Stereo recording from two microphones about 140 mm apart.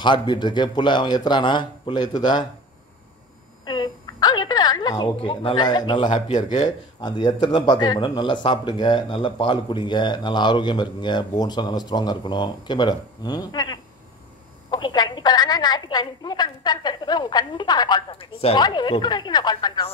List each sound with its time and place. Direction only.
0.0 s a woman's voice: 35° left (ahead or behind)
3.6 s a woman's voice: 30° left (ahead or behind)
18.1 s speech: 45° left (ahead or behind)
18.6 s a woman's voice: 30° left (ahead or behind)